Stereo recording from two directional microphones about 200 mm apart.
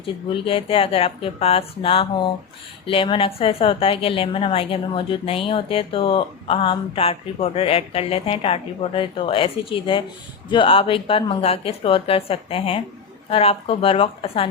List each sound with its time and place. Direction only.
0.0 s a woman's voice: 25° left (ahead or behind)